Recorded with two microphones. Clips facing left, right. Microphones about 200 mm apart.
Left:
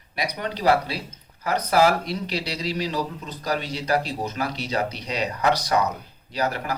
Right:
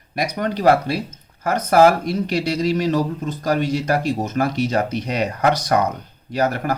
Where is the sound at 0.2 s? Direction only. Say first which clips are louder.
Right 6 dB; 45° right (ahead or behind).